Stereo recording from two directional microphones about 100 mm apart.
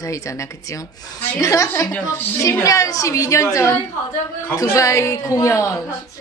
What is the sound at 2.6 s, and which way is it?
Speech, 35° left (ahead or behind).